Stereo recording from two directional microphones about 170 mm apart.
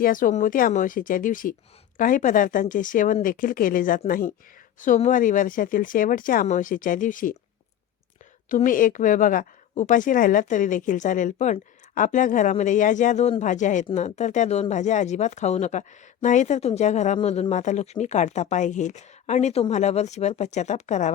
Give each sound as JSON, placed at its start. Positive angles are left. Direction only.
{"t": 0.0, "sound": "a woman's voice", "side_deg": 55}
{"t": 8.4, "sound": "a woman's voice", "side_deg": 50}